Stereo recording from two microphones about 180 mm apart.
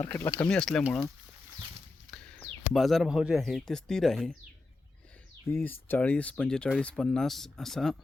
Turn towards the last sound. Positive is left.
turn(degrees=0)  # may be behind; listen again after turning